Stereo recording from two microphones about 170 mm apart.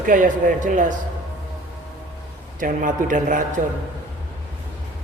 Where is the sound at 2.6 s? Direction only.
50° right (ahead or behind).